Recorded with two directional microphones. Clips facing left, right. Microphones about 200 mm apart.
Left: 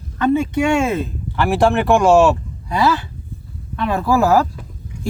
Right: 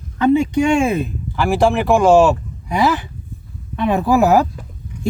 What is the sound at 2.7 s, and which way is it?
Speech, 15° right (ahead or behind).